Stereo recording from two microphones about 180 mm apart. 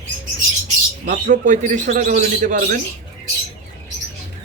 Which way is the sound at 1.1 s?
50° right (ahead or behind).